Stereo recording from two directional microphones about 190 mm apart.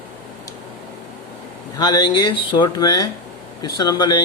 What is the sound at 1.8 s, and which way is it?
Speech, 20° left (ahead or behind).